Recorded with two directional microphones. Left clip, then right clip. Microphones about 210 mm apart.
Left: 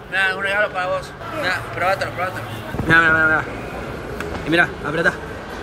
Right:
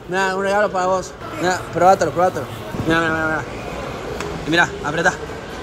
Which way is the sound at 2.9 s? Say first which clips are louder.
Left 5 dB; 10° right (ahead or behind).